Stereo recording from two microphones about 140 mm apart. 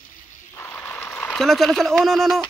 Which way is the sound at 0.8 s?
15° left (ahead or behind).